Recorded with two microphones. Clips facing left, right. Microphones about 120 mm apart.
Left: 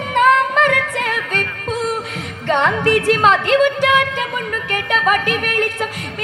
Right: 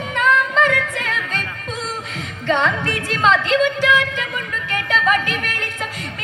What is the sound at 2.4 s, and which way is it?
Music, 55° left (ahead or behind).